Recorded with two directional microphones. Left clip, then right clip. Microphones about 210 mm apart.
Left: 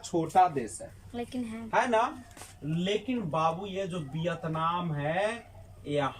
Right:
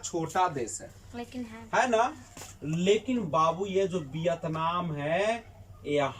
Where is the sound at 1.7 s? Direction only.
5° right (ahead or behind).